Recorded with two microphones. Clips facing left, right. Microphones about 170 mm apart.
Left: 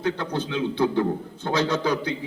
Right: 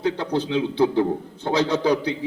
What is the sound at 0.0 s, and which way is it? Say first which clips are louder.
A man's voice: right 3 dB; 35° right (ahead or behind).